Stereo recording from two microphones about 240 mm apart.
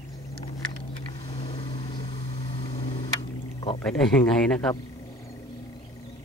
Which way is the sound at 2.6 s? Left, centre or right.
Left.